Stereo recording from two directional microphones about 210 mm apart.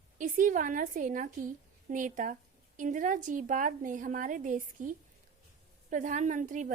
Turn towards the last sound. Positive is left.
turn(degrees=-40)  # may be behind; listen again after turning